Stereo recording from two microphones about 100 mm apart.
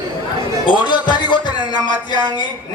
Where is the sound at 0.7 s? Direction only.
50° left (ahead or behind).